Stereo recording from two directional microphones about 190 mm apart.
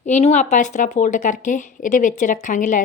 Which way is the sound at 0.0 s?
35° left (ahead or behind).